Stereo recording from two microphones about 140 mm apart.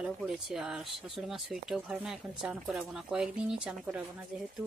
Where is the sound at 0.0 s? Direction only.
5° right (ahead or behind).